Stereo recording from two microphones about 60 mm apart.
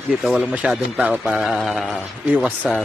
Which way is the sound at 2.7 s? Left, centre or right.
Centre.